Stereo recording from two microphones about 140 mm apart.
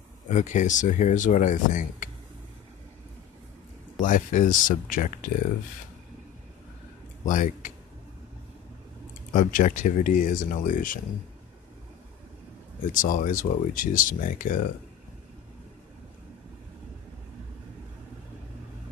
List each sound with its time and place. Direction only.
0.3 s speech: 60° left (ahead or behind)
4.0 s speech: 70° left (ahead or behind)
7.2 s speech: 70° left (ahead or behind)
9.3 s speech: 70° left (ahead or behind)
12.9 s speech: 75° left (ahead or behind)